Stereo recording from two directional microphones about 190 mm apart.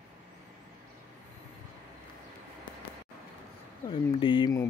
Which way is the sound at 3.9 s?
25° left (ahead or behind).